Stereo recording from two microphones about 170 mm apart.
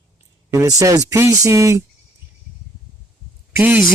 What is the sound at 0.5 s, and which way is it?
Speech, 20° right (ahead or behind).